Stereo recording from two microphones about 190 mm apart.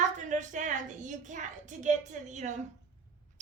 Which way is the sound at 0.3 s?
40° right (ahead or behind).